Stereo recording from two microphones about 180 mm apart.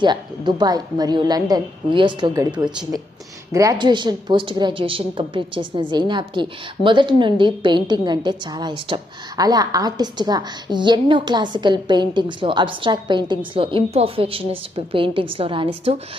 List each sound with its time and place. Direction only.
0.0 s a woman's voice: 25° right (ahead or behind)
3.5 s a woman's voice: 20° right (ahead or behind)